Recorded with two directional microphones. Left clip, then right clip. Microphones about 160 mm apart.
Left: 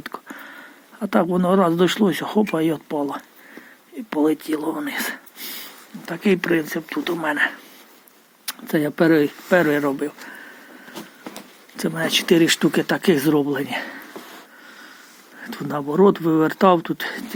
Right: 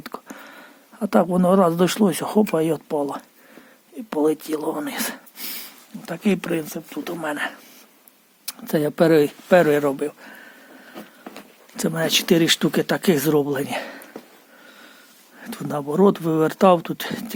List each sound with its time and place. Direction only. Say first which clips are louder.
0.0 s a sound: left 2 dB; 25° right (ahead or behind)
1.5 s speech: even; 30° right (ahead or behind); by 5.6 s 45° right (ahead or behind)
6.1 s speech: left 4 dB; 25° right (ahead or behind)
8.4 s speech: even; 35° right (ahead or behind)
11.8 s speech: even; 40° right (ahead or behind)
15.4 s speech: left 1 dB; 30° right (ahead or behind)